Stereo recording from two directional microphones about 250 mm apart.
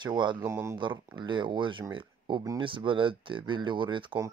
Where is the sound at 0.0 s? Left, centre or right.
Centre.